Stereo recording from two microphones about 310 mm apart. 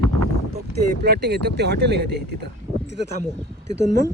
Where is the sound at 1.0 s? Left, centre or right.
Right.